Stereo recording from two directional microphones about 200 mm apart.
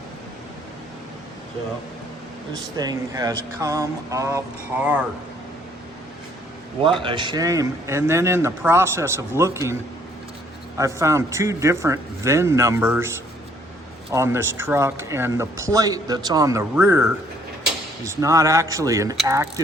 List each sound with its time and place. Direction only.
2.5 s speech: 20° right (ahead or behind)
6.8 s speech: 25° right (ahead or behind)
10.8 s speech: 15° right (ahead or behind)
14.1 s speech: 15° right (ahead or behind)